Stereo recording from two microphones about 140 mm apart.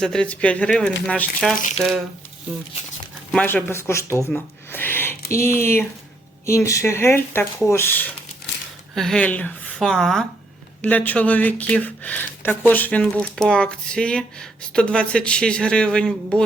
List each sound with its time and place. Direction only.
0.0 s speech: 5° left (ahead or behind)
3.4 s speech: 15° left (ahead or behind)